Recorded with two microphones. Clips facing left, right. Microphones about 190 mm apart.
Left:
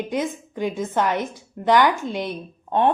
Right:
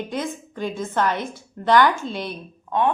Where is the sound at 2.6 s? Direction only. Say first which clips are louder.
Left 2 dB; 35° left (ahead or behind).